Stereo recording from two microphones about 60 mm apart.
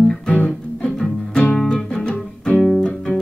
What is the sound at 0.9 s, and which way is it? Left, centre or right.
Music, centre.